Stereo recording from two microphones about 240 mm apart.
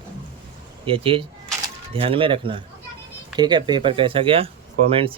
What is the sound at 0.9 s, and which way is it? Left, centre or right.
Speech, right.